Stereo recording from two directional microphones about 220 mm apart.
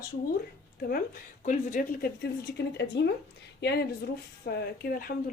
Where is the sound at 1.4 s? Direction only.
35° left (ahead or behind).